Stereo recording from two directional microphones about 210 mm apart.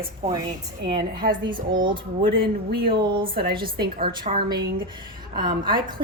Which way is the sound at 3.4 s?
45° right (ahead or behind).